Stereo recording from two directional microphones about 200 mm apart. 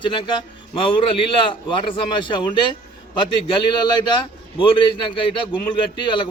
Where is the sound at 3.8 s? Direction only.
20° left (ahead or behind).